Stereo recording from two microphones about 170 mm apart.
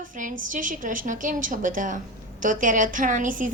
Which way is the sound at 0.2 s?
50° right (ahead or behind).